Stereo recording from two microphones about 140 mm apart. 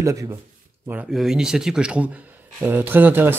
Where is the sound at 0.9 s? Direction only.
5° right (ahead or behind).